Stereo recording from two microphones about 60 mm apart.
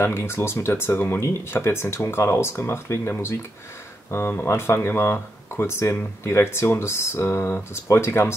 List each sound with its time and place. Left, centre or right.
0.0 s speech: left
1.2 s speech: left
4.5 s speech: left